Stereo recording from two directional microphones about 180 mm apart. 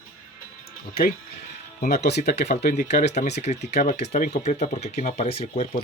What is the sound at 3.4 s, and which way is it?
Speech, 40° left (ahead or behind).